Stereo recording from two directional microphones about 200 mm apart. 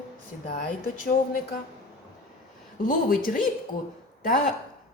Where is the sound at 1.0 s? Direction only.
45° left (ahead or behind).